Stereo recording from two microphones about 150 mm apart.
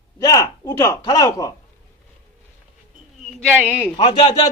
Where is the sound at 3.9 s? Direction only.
30° left (ahead or behind).